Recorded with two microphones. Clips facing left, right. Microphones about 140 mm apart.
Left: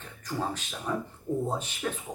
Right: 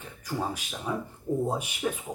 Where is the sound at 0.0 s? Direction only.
10° right (ahead or behind).